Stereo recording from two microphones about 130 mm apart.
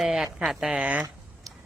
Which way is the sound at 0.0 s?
5° right (ahead or behind).